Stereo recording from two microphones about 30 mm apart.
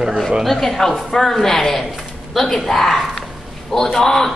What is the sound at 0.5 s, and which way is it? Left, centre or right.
A woman's voice, centre.